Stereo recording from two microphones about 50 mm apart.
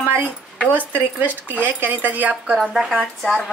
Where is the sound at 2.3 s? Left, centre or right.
Centre.